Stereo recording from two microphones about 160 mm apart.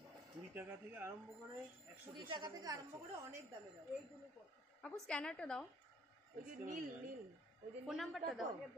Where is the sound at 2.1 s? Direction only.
30° right (ahead or behind).